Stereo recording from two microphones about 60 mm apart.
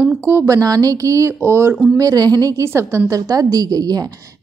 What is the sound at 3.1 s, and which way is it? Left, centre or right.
Speech, right.